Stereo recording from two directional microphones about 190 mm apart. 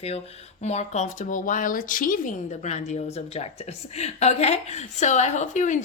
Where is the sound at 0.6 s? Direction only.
35° left (ahead or behind).